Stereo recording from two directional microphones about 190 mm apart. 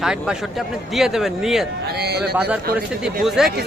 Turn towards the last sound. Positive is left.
turn(degrees=0)  # may be behind; listen again after turning